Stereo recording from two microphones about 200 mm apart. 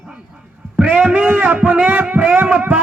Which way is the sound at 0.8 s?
5° right (ahead or behind).